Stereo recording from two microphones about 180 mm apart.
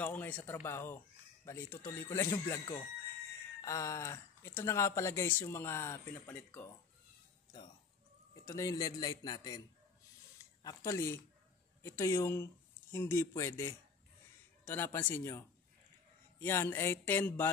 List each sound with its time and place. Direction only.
0.0 s speech: 10° left (ahead or behind)
8.5 s a man's voice: 15° left (ahead or behind)
10.6 s speech: 20° left (ahead or behind)